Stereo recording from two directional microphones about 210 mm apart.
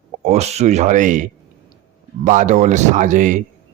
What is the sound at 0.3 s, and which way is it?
Speech, 30° right (ahead or behind).